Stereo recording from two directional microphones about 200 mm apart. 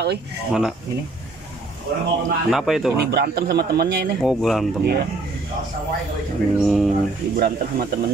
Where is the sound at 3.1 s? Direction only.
55° right (ahead or behind).